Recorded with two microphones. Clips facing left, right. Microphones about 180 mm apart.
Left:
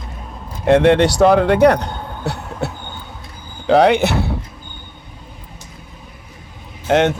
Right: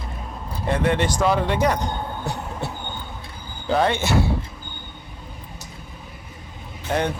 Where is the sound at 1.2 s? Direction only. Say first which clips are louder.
Left 10 dB; 65° left (ahead or behind).